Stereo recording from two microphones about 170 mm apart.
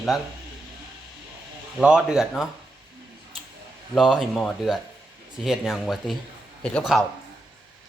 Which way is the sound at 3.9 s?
Centre (ahead or behind).